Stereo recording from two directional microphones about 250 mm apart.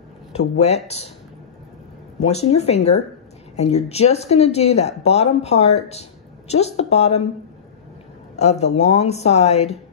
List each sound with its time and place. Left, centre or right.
0.6 s speech: left
2.5 s speech: left
8.4 s speech: left